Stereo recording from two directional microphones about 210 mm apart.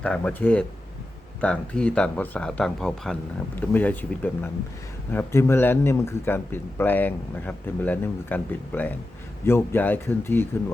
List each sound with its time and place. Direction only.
0.0 s a man's voice: 5° left (ahead or behind)